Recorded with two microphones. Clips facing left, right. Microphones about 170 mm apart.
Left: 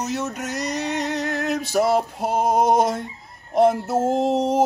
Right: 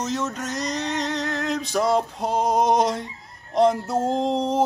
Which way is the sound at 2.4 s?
50° left (ahead or behind).